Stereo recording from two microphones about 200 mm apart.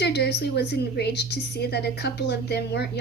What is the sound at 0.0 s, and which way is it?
A woman's voice, 55° left (ahead or behind).